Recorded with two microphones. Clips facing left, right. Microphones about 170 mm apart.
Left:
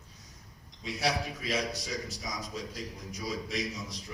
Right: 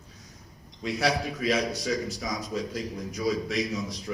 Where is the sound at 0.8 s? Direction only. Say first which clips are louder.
Right 5 dB; 75° right (ahead or behind); by 4.1 s 90° right.